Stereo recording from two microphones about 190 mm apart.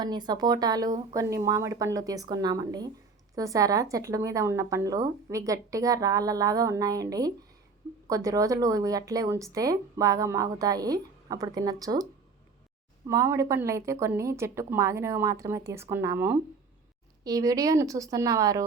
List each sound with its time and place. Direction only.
0.0 s speech: 20° right (ahead or behind)
13.1 s speech: 15° right (ahead or behind)